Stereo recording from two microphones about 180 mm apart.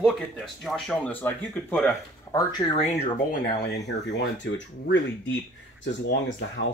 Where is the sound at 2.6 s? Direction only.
30° left (ahead or behind).